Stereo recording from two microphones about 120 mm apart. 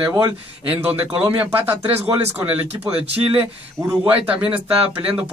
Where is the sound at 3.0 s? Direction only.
55° right (ahead or behind).